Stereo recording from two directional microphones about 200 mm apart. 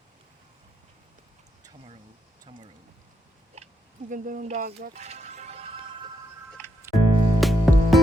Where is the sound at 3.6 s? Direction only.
35° right (ahead or behind).